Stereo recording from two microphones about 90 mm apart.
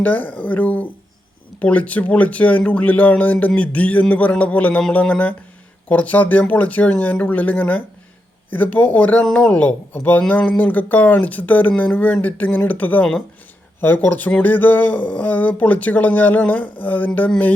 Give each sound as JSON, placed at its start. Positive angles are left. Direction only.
{"t": 0.0, "sound": "speech", "side_deg": 15}